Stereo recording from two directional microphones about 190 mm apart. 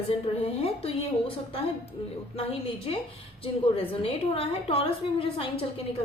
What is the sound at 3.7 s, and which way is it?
A woman's voice, 30° left (ahead or behind).